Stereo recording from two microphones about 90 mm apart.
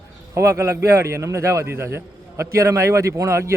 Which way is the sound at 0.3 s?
30° right (ahead or behind).